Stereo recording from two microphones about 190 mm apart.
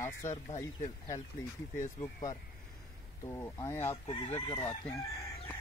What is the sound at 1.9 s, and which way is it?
A man's voice, 20° left (ahead or behind).